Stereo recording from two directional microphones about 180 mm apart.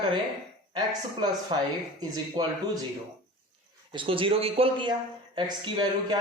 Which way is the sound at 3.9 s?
30° right (ahead or behind).